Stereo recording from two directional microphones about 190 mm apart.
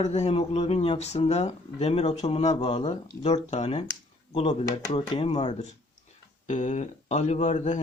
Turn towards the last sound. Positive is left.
turn(degrees=40)  # may be behind; listen again after turning